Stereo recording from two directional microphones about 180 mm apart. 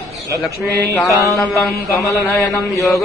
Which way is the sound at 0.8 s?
15° left (ahead or behind).